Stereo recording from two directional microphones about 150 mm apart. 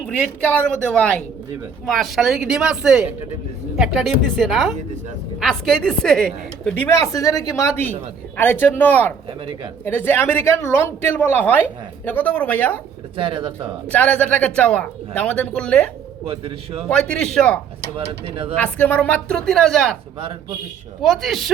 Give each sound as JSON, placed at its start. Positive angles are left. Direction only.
{"t": 0.5, "sound": "a man's voice", "side_deg": 5}
{"t": 7.0, "sound": "a woman's voice", "side_deg": 20}
{"t": 13.1, "sound": "a man's voice", "side_deg": -35}
{"t": 13.8, "sound": "a man's voice", "side_deg": 10}
{"t": 16.2, "sound": "a man's voice", "side_deg": -40}
{"t": 16.9, "sound": "a woman's voice", "side_deg": 5}
{"t": 21.0, "sound": "a woman's voice", "side_deg": 0}